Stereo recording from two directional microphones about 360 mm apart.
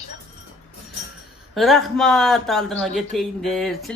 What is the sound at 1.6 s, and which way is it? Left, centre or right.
A man's voice, centre.